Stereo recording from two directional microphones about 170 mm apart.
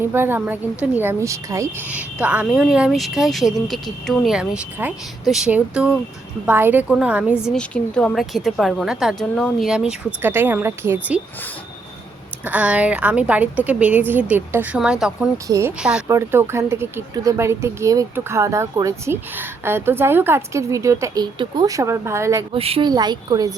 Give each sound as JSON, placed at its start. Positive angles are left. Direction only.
{"t": 0.0, "sound": "a woman's voice", "side_deg": -15}
{"t": 7.5, "sound": "a woman's voice", "side_deg": 5}
{"t": 12.5, "sound": "speech", "side_deg": -10}
{"t": 15.4, "sound": "speech", "side_deg": -20}
{"t": 15.8, "sound": "a woman's voice", "side_deg": -5}
{"t": 16.0, "sound": "speech", "side_deg": -15}
{"t": 22.5, "sound": "speech", "side_deg": -35}
{"t": 22.9, "sound": "speech", "side_deg": -25}